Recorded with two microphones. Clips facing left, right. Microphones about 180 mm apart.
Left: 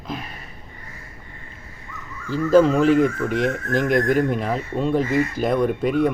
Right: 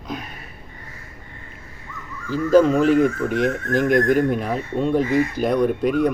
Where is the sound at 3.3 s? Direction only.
45° right (ahead or behind).